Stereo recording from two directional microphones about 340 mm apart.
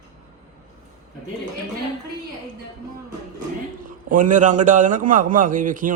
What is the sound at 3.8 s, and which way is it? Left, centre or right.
A man's voice, right.